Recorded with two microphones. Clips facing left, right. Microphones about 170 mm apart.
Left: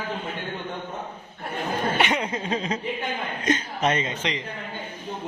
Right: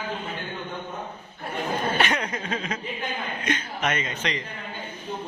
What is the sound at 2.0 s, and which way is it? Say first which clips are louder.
A woman's voice: left 1 dB; 20° left (ahead or behind).